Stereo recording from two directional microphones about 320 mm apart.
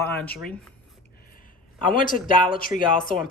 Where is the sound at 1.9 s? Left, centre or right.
Left.